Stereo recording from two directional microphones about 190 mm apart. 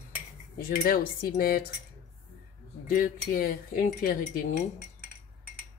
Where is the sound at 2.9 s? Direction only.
45° left (ahead or behind).